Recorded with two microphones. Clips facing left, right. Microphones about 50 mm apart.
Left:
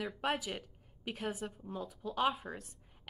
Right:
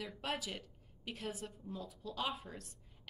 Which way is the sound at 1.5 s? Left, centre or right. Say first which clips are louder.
Left 4 dB; left.